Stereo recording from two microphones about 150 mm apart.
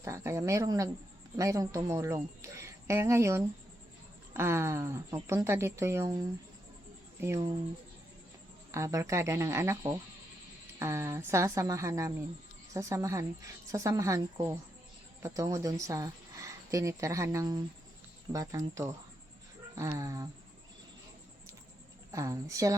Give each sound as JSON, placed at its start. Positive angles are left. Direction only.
{"t": 0.0, "sound": "speech", "side_deg": -20}
{"t": 8.7, "sound": "speech", "side_deg": -20}
{"t": 22.1, "sound": "speech", "side_deg": -20}